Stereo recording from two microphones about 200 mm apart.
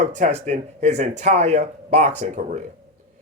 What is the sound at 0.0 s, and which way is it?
Speech, 40° right (ahead or behind).